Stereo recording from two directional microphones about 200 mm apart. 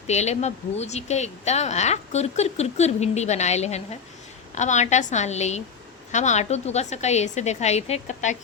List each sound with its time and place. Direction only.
0.1 s speech: 35° left (ahead or behind)